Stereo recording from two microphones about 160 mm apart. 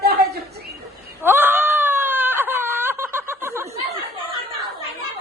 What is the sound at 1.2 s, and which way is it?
Wail, 15° right (ahead or behind).